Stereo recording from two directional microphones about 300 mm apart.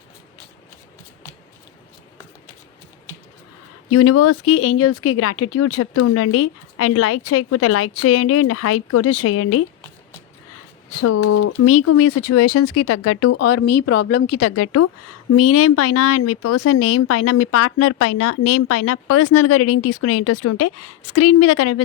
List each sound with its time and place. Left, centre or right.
3.8 s speech: left
10.9 s speech: left